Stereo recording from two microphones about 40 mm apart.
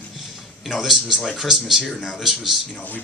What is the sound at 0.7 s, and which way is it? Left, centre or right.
Speech, centre.